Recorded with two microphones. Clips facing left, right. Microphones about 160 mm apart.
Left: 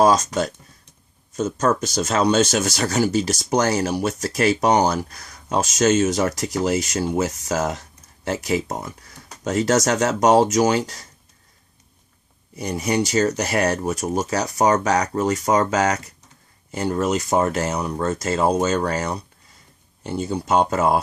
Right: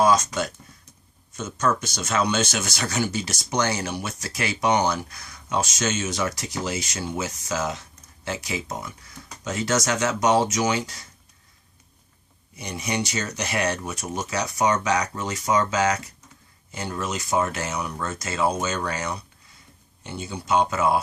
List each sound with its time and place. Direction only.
0.0 s speech: 35° left (ahead or behind)
12.5 s speech: 40° left (ahead or behind)